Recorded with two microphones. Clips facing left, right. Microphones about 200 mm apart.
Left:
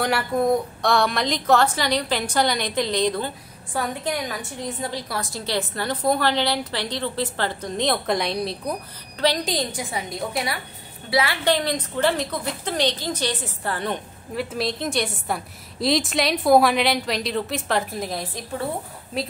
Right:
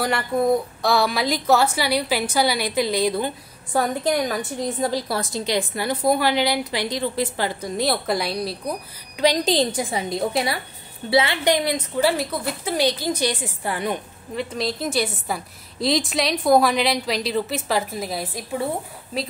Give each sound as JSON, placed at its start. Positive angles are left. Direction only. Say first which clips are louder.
{"t": 0.0, "sound": "a woman's voice", "louder": "even", "side_deg": 0}
{"t": 3.7, "sound": "a woman's voice", "louder": "right 5 dB", "side_deg": -40}
{"t": 5.3, "sound": "a woman's voice", "louder": "right 2 dB", "side_deg": -15}
{"t": 9.4, "sound": "a woman's voice", "louder": "right 6 dB", "side_deg": -30}
{"t": 14.3, "sound": "a woman's voice", "louder": "even", "side_deg": 5}